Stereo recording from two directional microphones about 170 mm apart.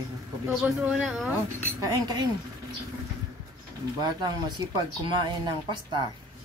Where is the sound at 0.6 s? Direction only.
5° right (ahead or behind).